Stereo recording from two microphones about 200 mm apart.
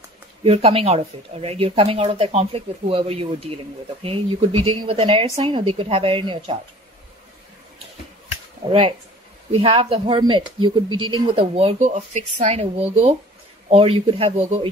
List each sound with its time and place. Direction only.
0.4 s speech: 30° right (ahead or behind)
9.5 s a woman's voice: 25° right (ahead or behind)